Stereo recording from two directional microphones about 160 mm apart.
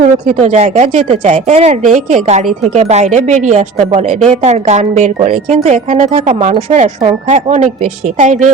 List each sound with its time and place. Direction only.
0.3 s speech: 40° right (ahead or behind)